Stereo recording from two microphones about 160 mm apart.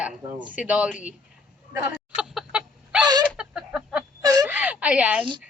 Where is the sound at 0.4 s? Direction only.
10° right (ahead or behind).